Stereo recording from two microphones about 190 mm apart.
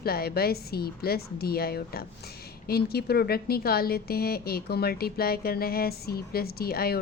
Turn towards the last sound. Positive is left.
turn(degrees=55)  # may be behind; listen again after turning